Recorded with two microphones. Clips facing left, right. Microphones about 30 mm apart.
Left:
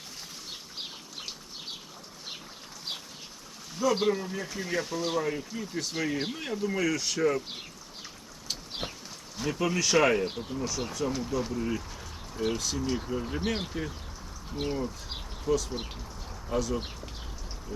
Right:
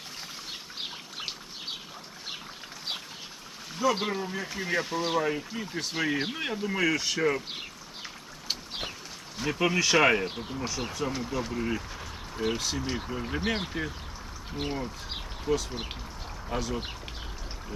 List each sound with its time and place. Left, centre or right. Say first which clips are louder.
3.8 s speech: left 1 dB; centre
8.0 s a sound: right 4 dB; right
9.4 s speech: right 2 dB; right